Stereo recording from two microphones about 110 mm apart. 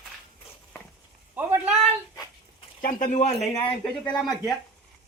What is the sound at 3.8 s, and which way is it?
Speech, 10° left (ahead or behind).